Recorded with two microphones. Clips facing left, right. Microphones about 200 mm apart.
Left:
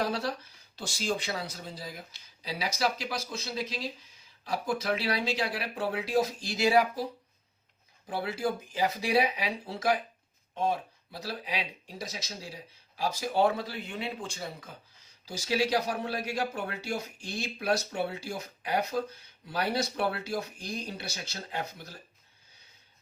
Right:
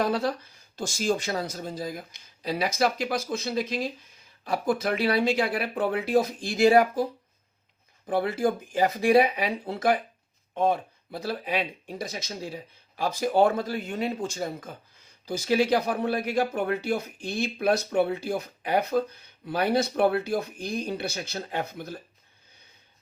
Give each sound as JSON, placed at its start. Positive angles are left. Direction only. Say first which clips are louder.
{"t": 0.0, "sound": "speech", "louder": "right 5 dB", "side_deg": -55}